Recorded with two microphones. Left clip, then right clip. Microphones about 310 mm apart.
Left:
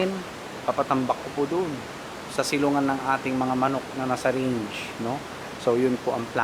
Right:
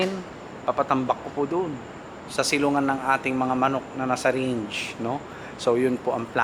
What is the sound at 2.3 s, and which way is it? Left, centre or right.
Speech, centre.